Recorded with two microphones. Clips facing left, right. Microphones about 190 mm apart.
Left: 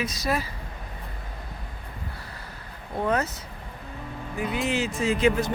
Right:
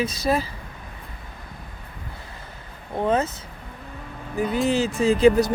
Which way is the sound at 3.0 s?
25° right (ahead or behind).